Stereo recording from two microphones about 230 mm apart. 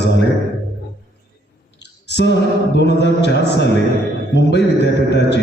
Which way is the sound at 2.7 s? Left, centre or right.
Left.